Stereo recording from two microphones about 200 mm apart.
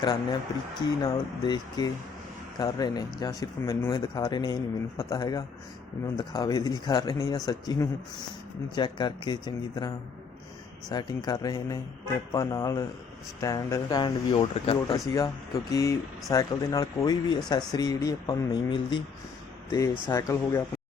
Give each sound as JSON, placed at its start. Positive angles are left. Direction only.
{"t": 0.0, "sound": "speech", "side_deg": 20}
{"t": 14.9, "sound": "speech", "side_deg": 15}
{"t": 20.1, "sound": "speech", "side_deg": 15}